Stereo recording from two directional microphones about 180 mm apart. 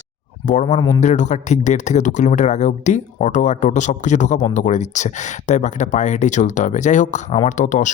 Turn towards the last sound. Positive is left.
turn(degrees=45)  # may be behind; listen again after turning